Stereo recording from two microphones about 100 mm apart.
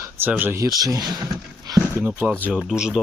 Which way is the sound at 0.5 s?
35° right (ahead or behind).